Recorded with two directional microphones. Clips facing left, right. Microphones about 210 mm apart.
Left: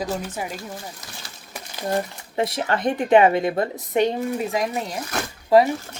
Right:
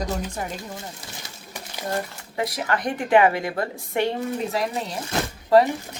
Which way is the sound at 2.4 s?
25° left (ahead or behind).